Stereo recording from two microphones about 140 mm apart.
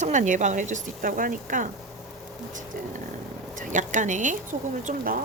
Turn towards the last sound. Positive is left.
turn(degrees=-65)  # may be behind; listen again after turning